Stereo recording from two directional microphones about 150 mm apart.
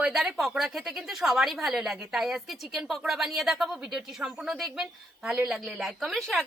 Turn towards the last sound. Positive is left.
turn(degrees=0)  # may be behind; listen again after turning